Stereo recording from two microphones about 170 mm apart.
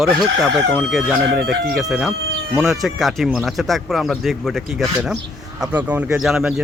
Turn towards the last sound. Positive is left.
turn(degrees=-5)  # may be behind; listen again after turning